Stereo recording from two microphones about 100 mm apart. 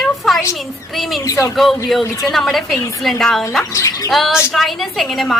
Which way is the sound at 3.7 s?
30° left (ahead or behind).